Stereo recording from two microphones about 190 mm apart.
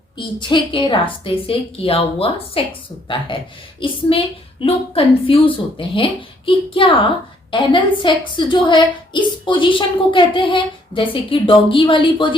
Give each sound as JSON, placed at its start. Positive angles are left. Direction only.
{"t": 0.2, "sound": "a woman's voice", "side_deg": 25}